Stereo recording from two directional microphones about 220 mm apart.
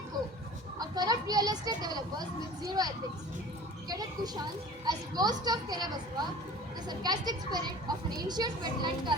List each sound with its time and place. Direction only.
0.8 s speech: 20° right (ahead or behind)